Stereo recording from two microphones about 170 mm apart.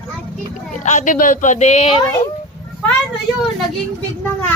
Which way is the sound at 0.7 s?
45° left (ahead or behind).